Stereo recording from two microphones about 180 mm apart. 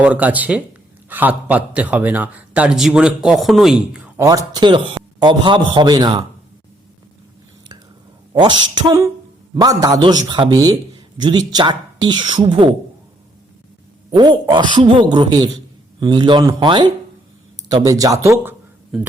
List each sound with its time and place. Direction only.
0.0 s a man's voice: 10° right (ahead or behind)
4.2 s speech: 20° right (ahead or behind)
8.3 s speech: 25° right (ahead or behind)
14.1 s speech: 25° right (ahead or behind)